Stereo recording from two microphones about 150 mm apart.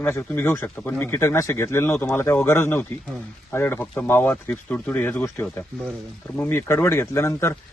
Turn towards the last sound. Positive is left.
turn(degrees=20)  # may be behind; listen again after turning